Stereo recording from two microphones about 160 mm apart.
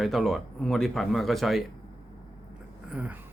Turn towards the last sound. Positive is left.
turn(degrees=-10)  # may be behind; listen again after turning